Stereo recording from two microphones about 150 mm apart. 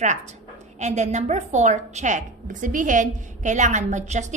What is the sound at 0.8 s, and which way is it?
A woman's voice, 50° right (ahead or behind).